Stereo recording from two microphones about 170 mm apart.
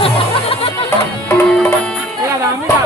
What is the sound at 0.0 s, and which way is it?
Music, 35° left (ahead or behind).